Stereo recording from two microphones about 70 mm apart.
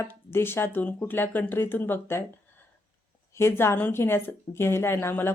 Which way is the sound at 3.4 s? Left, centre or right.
Left.